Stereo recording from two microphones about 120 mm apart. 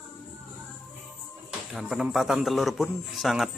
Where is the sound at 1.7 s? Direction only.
Centre (ahead or behind).